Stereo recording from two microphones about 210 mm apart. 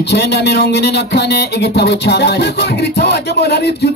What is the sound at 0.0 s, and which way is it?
A woman's voice, 55° left (ahead or behind).